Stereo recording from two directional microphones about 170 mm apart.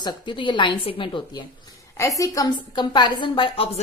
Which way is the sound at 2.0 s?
20° left (ahead or behind).